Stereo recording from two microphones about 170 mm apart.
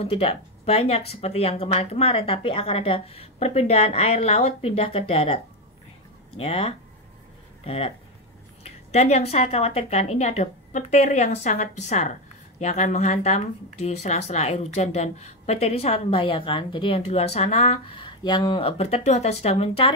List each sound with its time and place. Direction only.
0.0 s speech: 35° left (ahead or behind)
6.4 s speech: 35° left (ahead or behind)